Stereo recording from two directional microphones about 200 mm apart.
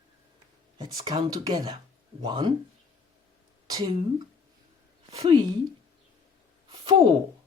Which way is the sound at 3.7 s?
20° right (ahead or behind).